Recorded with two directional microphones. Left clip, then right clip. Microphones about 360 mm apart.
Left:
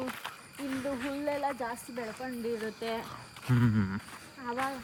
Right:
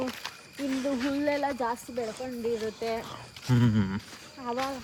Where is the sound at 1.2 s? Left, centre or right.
Right.